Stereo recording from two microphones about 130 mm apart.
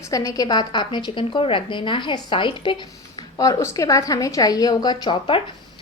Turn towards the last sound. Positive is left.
turn(degrees=35)  # may be behind; listen again after turning